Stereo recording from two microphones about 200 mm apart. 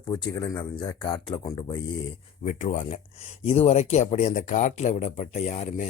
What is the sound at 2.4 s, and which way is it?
Speech, 35° left (ahead or behind).